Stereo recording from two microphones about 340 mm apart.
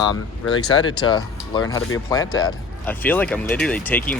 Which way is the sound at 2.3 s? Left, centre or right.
Centre.